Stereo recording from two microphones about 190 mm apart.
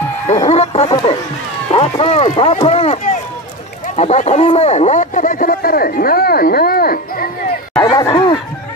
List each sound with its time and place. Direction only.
0.5 s speech: 35° left (ahead or behind)
0.8 s speech: 20° left (ahead or behind)
1.7 s speech: 30° left (ahead or behind); by 7.2 s 50° left (ahead or behind)
7.7 s chatter: 25° left (ahead or behind)